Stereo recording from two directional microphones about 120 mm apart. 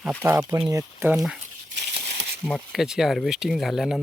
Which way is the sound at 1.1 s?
5° right (ahead or behind).